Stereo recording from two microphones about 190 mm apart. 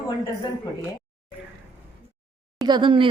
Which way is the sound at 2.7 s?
25° right (ahead or behind).